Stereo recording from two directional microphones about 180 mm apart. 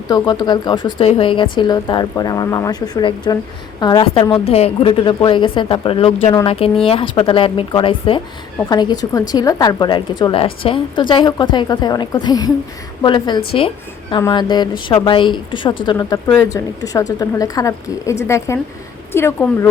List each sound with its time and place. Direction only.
0.1 s a woman's voice: 20° left (ahead or behind)